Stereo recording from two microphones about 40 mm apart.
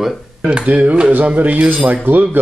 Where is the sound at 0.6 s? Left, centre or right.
Right.